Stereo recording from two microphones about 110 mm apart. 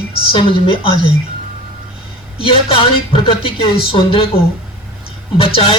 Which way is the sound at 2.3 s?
55° left (ahead or behind).